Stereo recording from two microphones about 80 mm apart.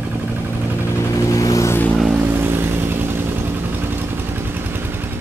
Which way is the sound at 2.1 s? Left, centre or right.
Right.